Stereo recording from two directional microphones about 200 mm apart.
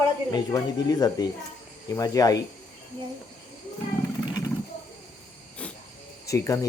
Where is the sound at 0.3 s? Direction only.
20° left (ahead or behind).